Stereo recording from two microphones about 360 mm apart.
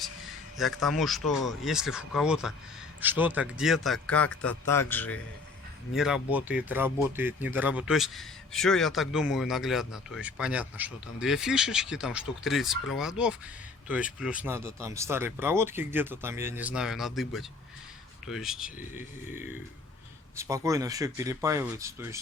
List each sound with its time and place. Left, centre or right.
0.5 s speech: centre